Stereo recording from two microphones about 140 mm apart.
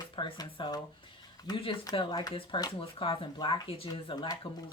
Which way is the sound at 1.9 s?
35° left (ahead or behind).